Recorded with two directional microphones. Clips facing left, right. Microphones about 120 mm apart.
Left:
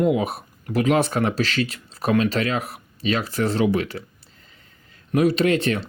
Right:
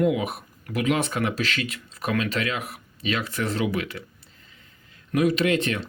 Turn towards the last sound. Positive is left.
turn(degrees=35)  # may be behind; listen again after turning